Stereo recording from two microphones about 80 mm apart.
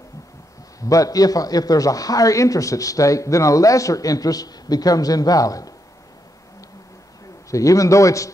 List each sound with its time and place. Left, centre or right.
0.7 s a man's voice: left
7.5 s a man's voice: left